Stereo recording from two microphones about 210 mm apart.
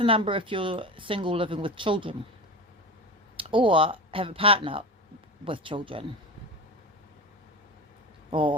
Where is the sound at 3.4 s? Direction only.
25° right (ahead or behind).